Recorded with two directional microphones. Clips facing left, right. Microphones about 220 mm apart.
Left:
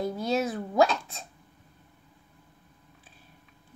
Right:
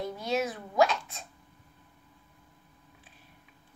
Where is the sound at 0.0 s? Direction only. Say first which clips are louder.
Left 3 dB; 30° left (ahead or behind).